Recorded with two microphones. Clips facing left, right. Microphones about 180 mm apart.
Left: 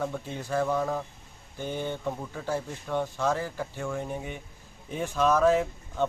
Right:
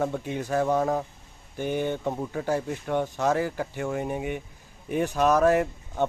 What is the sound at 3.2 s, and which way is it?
Speech, 15° right (ahead or behind).